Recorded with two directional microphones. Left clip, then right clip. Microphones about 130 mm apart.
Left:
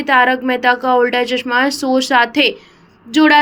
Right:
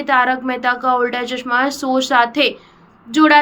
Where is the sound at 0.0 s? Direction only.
25° left (ahead or behind).